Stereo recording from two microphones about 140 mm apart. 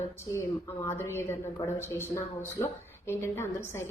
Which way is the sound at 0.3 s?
20° left (ahead or behind).